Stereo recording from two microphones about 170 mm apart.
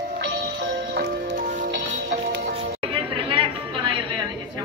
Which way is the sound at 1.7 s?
90° right.